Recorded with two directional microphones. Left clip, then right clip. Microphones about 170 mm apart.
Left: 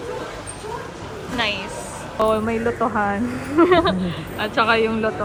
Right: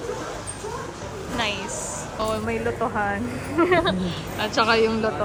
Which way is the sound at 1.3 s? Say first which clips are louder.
Left 3 dB; centre (ahead or behind).